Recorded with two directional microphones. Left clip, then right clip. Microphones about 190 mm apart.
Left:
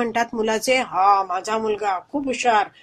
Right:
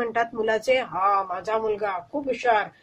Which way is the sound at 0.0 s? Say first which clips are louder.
Left 3 dB; 35° left (ahead or behind).